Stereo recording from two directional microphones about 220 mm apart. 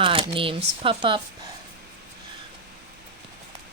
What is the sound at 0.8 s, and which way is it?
Speech, 25° right (ahead or behind).